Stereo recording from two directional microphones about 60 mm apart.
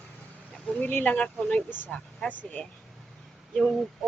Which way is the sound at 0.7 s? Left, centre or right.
Left.